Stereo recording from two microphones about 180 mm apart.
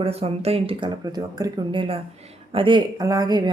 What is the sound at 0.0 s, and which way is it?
Speech, 35° right (ahead or behind).